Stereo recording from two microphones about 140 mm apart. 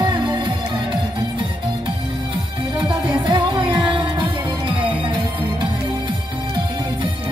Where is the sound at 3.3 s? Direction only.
35° right (ahead or behind).